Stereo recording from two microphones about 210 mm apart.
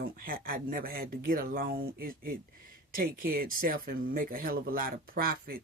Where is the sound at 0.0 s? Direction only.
45° right (ahead or behind).